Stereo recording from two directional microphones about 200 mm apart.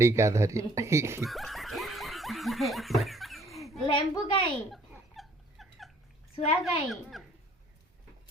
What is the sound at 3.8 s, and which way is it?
Speech, 25° left (ahead or behind).